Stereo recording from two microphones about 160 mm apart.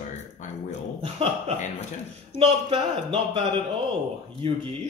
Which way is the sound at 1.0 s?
40° right (ahead or behind).